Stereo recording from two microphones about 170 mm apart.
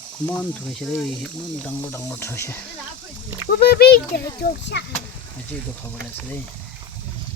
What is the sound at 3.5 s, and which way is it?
A child's voice, 60° left (ahead or behind).